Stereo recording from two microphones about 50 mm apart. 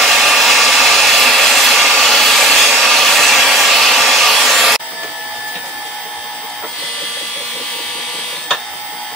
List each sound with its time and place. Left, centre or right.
0.0 s hair dryer: centre